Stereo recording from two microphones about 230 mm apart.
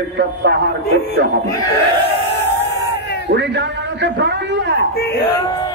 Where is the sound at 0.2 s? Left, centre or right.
Right.